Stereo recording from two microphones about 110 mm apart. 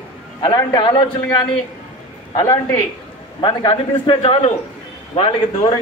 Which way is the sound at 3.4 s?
50° left (ahead or behind).